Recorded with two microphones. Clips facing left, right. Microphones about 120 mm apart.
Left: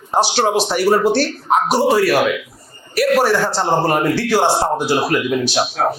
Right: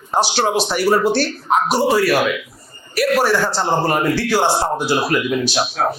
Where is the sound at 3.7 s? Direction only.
45° left (ahead or behind).